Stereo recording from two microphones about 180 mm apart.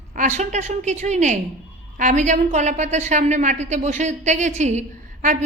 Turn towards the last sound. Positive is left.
turn(degrees=-40)  # may be behind; listen again after turning